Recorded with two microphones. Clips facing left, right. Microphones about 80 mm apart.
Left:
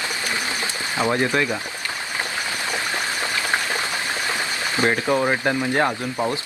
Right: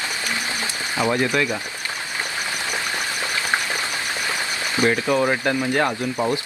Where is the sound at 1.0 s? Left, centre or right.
Left.